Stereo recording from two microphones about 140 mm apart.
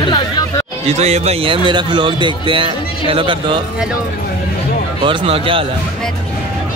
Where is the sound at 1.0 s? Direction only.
50° right (ahead or behind).